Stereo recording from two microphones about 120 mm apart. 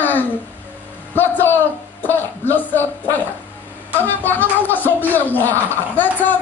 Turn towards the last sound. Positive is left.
turn(degrees=15)  # may be behind; listen again after turning